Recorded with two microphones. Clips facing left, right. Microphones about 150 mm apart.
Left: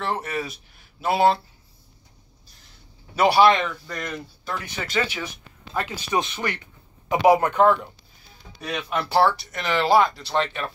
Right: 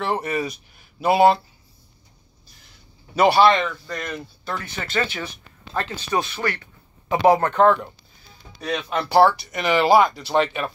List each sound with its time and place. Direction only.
0.0 s speech: centre (ahead or behind)
3.2 s speech: 10° left (ahead or behind)